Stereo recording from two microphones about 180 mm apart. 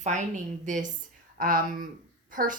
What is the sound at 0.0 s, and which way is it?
Speech, 40° right (ahead or behind).